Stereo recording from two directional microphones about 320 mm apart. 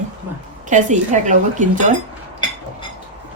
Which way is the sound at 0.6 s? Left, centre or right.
Right.